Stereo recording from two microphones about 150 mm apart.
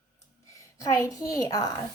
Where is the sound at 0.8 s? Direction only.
20° left (ahead or behind).